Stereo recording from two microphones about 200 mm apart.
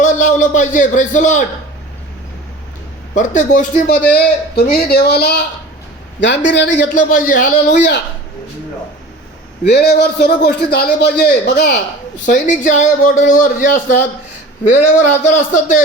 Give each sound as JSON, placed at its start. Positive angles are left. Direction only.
{"t": 0.0, "sound": "a man's voice", "side_deg": 40}
{"t": 3.2, "sound": "a man's voice", "side_deg": 40}
{"t": 4.1, "sound": "speech", "side_deg": 55}
{"t": 6.9, "sound": "a man's voice", "side_deg": 40}
{"t": 7.7, "sound": "speech", "side_deg": 60}
{"t": 9.6, "sound": "speech", "side_deg": 55}
{"t": 12.1, "sound": "a man's voice", "side_deg": 40}